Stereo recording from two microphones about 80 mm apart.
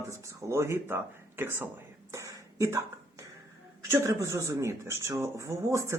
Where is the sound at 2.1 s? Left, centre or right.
Right.